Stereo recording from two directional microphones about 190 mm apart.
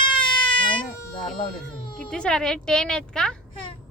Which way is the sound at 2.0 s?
5° left (ahead or behind).